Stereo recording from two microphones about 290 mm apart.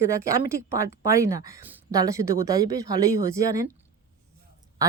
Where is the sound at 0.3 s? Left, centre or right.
Centre.